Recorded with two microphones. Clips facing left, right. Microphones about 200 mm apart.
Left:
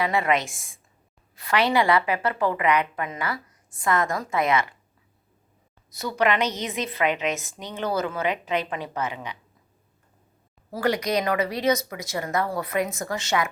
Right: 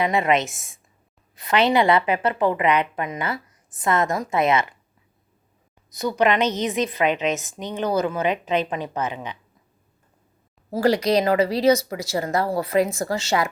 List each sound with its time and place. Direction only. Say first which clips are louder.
0.0 s a woman's voice: right 3 dB; 20° right (ahead or behind)
5.9 s a woman's voice: right 3 dB; 20° right (ahead or behind)
10.7 s speech: right 5 dB; 30° right (ahead or behind)